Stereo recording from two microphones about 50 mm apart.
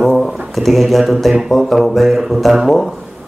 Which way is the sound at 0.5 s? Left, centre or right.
Centre.